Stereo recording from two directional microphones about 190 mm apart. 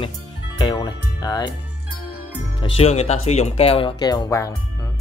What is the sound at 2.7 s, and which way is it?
Speech, 35° left (ahead or behind).